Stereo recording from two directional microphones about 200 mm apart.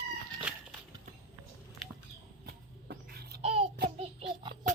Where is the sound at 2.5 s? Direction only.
50° right (ahead or behind).